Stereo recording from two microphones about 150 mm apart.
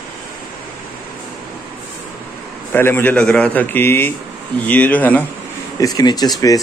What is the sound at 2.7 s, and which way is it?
A man's voice, 15° left (ahead or behind).